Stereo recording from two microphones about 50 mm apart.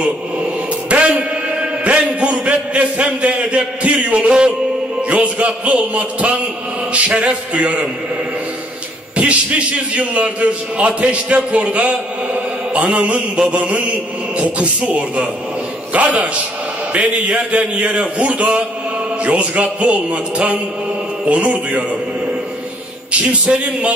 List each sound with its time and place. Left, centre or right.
0.8 s a sound: right
5.1 s a man's voice: right
9.9 s a man's voice: right
23.4 s a man's voice: right